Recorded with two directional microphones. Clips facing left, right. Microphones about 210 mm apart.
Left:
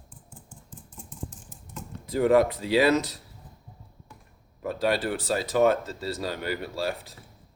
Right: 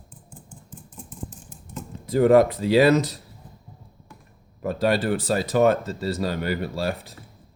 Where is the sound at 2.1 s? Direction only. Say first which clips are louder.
Right 5 dB; 45° right (ahead or behind).